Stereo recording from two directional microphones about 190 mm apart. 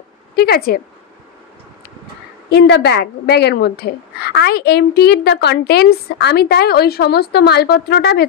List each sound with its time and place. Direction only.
0.4 s speech: 55° left (ahead or behind)
2.5 s a woman's voice: 60° left (ahead or behind)